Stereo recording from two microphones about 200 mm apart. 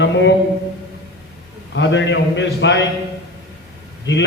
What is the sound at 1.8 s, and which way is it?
A man's voice, 65° left (ahead or behind).